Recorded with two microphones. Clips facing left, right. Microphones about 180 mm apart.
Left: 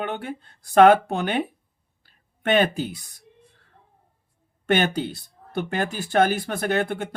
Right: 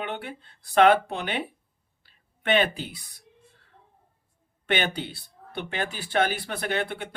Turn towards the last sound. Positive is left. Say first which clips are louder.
# left 5 dB
turn(degrees=45)  # may be behind; listen again after turning